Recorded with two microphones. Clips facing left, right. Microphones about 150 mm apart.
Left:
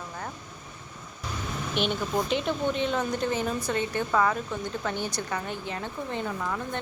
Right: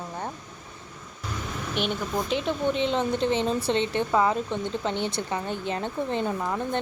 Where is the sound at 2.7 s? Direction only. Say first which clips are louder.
Right 3 dB; 25° right (ahead or behind).